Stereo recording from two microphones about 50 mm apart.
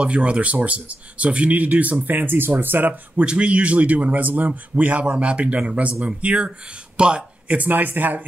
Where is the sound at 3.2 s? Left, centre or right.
Right.